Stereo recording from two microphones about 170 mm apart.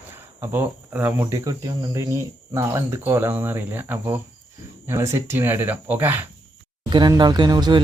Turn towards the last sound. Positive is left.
turn(degrees=-25)  # may be behind; listen again after turning